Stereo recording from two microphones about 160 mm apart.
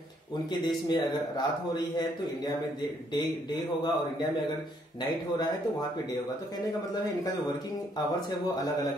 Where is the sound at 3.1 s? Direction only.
25° left (ahead or behind).